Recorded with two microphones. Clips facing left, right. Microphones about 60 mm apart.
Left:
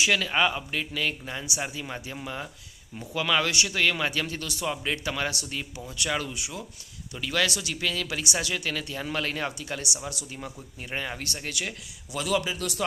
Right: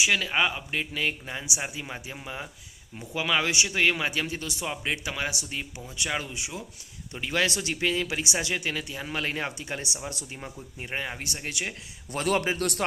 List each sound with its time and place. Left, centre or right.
0.0 s a man's voice: centre
12.1 s a man's voice: right